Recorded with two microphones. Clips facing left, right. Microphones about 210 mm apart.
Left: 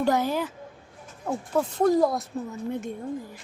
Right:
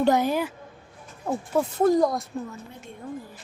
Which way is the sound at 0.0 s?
20° right (ahead or behind).